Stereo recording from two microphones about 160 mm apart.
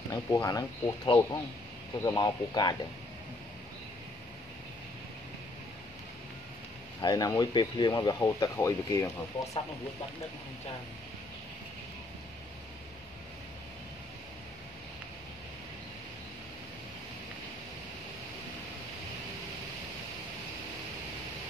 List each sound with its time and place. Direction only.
0.1 s speech: 20° left (ahead or behind)
7.0 s speech: 25° left (ahead or behind)